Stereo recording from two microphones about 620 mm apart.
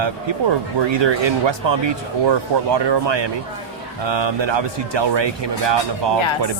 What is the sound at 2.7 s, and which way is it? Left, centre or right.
Speech, right.